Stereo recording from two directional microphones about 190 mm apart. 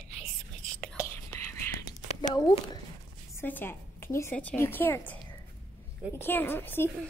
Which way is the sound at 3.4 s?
10° left (ahead or behind).